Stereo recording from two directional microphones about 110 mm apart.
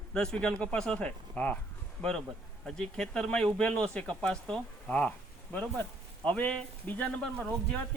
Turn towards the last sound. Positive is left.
turn(degrees=10)  # may be behind; listen again after turning